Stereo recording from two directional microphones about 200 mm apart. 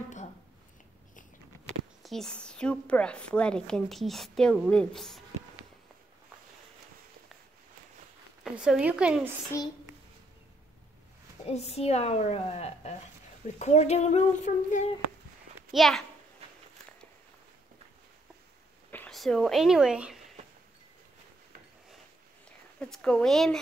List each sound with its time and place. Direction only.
2.0 s a woman's voice: 5° left (ahead or behind)
8.5 s a woman's voice: 5° right (ahead or behind)
11.4 s a woman's voice: 30° left (ahead or behind)
15.7 s a woman's voice: centre (ahead or behind)
18.9 s speech: 5° left (ahead or behind)
22.8 s a woman's voice: 5° left (ahead or behind)